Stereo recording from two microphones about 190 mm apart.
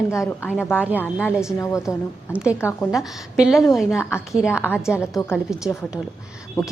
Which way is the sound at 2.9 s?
5° right (ahead or behind).